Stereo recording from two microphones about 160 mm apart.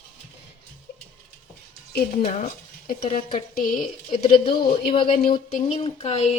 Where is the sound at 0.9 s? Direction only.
70° left (ahead or behind).